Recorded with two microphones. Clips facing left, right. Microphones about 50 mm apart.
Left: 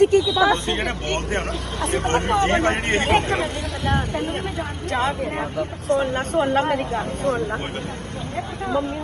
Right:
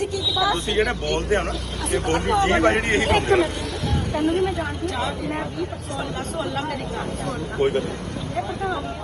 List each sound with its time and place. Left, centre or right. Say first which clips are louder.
0.0 s speech: left 7 dB; left